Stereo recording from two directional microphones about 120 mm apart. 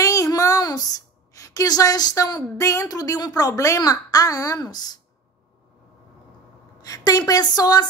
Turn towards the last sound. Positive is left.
turn(degrees=35)  # may be behind; listen again after turning